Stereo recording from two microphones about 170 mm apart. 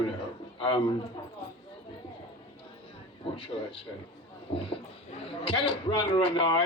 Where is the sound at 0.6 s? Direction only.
30° left (ahead or behind).